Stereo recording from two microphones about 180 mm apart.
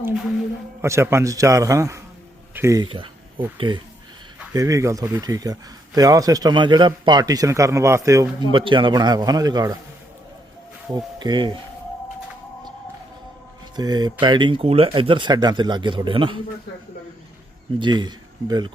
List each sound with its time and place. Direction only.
0.8 s a man's voice: 15° right (ahead or behind)
4.5 s a man's voice: 20° right (ahead or behind)
10.9 s a man's voice: 25° right (ahead or behind)
13.7 s a man's voice: 25° right (ahead or behind)
17.7 s a man's voice: 25° right (ahead or behind)